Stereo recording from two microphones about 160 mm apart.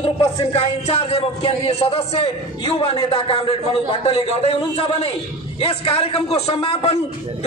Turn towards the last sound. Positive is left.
turn(degrees=35)  # may be behind; listen again after turning